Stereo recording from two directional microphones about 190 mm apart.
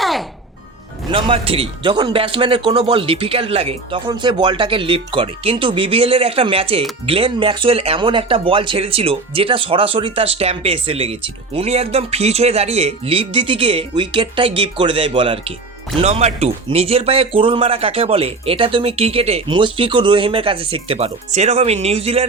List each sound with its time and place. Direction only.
0.0 s music: centre (ahead or behind)
1.1 s a man's voice: 30° right (ahead or behind)